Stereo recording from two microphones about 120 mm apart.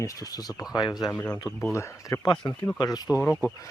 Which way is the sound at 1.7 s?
25° left (ahead or behind).